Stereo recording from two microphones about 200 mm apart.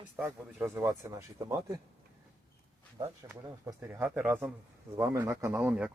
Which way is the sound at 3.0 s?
15° right (ahead or behind).